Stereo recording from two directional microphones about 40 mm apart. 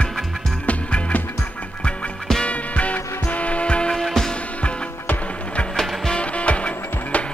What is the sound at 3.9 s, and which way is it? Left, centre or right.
Music, centre.